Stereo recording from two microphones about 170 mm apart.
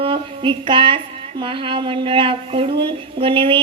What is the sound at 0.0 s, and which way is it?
A woman's voice, 30° right (ahead or behind).